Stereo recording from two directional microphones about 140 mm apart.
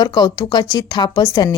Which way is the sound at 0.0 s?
30° left (ahead or behind).